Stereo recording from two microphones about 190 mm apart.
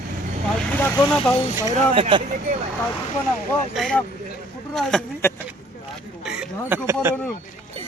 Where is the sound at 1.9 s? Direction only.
30° right (ahead or behind).